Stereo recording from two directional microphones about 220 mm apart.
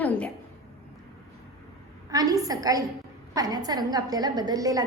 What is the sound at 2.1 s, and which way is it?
A woman's voice, 15° right (ahead or behind).